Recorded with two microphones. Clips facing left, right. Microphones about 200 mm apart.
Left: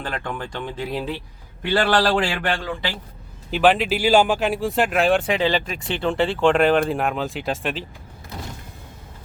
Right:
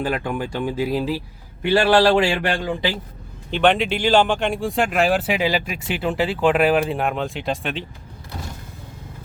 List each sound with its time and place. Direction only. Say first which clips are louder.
0.0 s speech: right 6 dB; 10° right (ahead or behind)
1.6 s speech: right 4 dB; 10° right (ahead or behind)
3.5 s speech: even; 5° left (ahead or behind)